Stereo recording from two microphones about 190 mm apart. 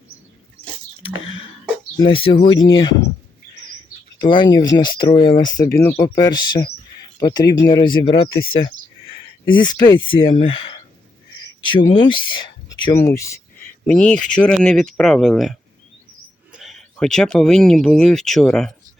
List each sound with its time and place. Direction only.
2.0 s speech: 25° left (ahead or behind)
4.2 s speech: 25° left (ahead or behind)
5.7 s speech: 10° left (ahead or behind)
6.0 s speech: 20° left (ahead or behind)
13.8 s speech: 5° left (ahead or behind)